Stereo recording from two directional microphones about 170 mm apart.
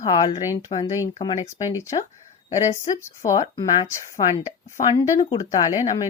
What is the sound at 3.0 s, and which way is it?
Speech, 20° left (ahead or behind).